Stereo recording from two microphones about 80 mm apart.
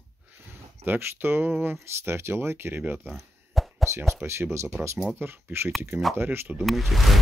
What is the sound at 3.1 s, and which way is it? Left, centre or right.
Chop, centre.